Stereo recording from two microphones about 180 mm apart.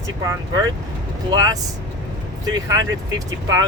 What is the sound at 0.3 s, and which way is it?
Speech, 20° right (ahead or behind).